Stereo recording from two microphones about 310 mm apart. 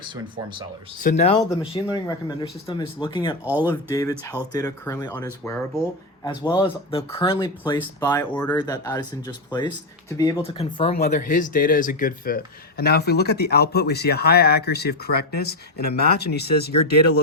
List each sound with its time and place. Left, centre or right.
1.0 s speech: left
3.4 s speech: centre
3.7 s speech: centre; by 16.7 s left